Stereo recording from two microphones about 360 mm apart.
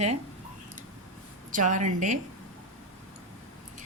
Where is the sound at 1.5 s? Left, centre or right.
Right.